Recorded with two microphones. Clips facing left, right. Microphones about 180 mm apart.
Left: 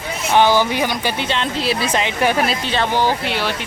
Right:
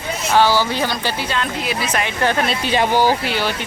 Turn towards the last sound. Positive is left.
turn(degrees=0)  # may be behind; listen again after turning